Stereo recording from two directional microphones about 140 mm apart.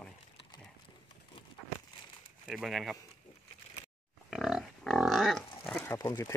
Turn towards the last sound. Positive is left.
turn(degrees=20)  # may be behind; listen again after turning